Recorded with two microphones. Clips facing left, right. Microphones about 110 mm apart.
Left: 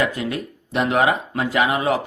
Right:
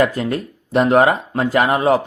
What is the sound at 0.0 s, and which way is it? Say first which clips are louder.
Speech: right 5 dB; 40° right (ahead or behind).